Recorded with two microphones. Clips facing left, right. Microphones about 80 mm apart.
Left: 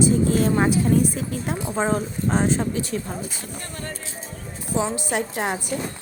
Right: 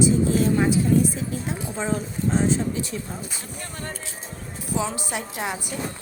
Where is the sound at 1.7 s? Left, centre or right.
Left.